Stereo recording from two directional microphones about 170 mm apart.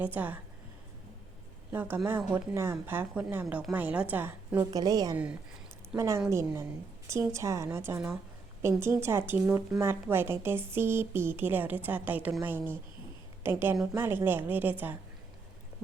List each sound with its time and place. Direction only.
0.0 s speech: 10° right (ahead or behind)
1.7 s speech: 10° right (ahead or behind)
4.7 s a woman's voice: 20° right (ahead or behind)
5.1 s a woman's voice: 5° right (ahead or behind)